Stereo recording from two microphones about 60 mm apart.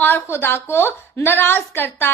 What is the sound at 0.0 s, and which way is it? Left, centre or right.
A woman's voice, left.